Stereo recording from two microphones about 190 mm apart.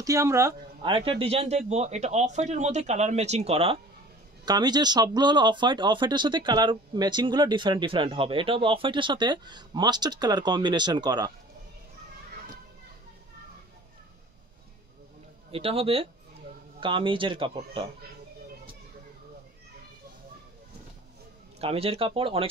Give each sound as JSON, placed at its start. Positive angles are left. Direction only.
{"t": 0.0, "sound": "speech", "side_deg": -15}
{"t": 15.5, "sound": "speech", "side_deg": -30}
{"t": 21.5, "sound": "speech", "side_deg": -30}